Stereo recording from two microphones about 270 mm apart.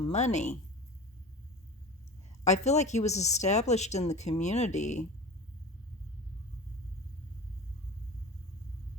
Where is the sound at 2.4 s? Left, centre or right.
Left.